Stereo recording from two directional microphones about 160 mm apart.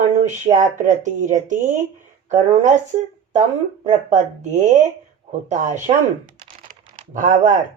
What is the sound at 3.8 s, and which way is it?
Speech, 50° right (ahead or behind).